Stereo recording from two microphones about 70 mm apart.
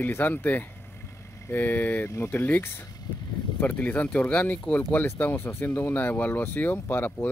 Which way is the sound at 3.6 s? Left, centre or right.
Left.